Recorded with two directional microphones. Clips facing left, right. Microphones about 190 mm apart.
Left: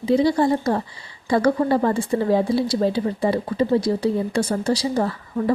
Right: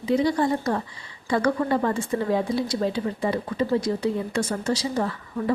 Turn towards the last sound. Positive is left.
turn(degrees=35)  # may be behind; listen again after turning